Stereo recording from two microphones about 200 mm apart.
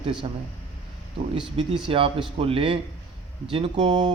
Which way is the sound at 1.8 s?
25° right (ahead or behind).